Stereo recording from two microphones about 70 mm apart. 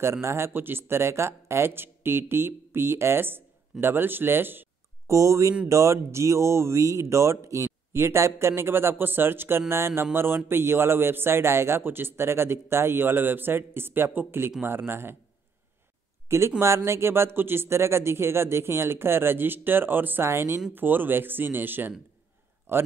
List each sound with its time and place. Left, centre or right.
0.0 s a man's voice: right
5.0 s a man's voice: right
16.3 s a man's voice: right